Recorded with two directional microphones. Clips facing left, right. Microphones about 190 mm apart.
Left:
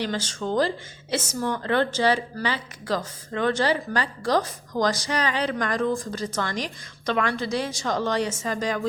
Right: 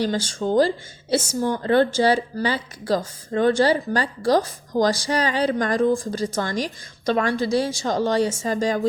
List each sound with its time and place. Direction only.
0.0 s speech: 40° right (ahead or behind)